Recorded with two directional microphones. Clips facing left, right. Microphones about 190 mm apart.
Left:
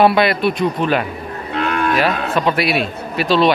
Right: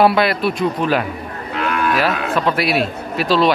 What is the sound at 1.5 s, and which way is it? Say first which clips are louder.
Moo: left 1 dB; 35° left (ahead or behind).